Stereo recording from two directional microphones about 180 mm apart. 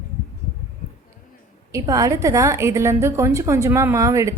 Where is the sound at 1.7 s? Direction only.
20° right (ahead or behind).